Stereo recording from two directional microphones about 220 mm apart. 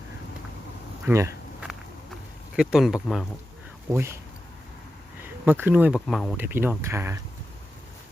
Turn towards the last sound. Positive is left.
turn(degrees=-10)  # may be behind; listen again after turning